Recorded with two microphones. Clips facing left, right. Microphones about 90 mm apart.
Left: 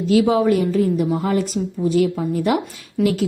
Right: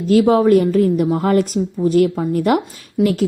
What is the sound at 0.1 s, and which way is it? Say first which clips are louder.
A woman's voice: right 4 dB; 45° right (ahead or behind).